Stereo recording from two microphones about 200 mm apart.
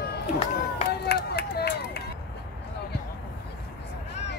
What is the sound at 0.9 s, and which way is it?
Run, 55° left (ahead or behind).